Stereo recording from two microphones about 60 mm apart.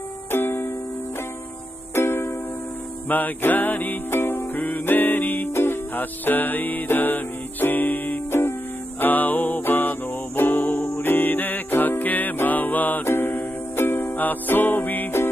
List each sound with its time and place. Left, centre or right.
0.3 s music: left
2.0 s music: left
3.1 s music: left
8.3 s music: left